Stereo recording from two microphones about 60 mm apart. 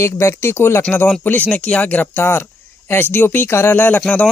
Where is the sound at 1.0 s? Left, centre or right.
Left.